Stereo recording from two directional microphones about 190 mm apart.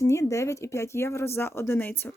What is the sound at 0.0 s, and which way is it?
Speech, 15° left (ahead or behind).